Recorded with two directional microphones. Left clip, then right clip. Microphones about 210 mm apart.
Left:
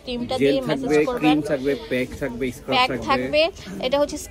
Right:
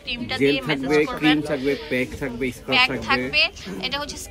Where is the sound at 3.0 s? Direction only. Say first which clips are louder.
Left 1 dB; 35° left (ahead or behind).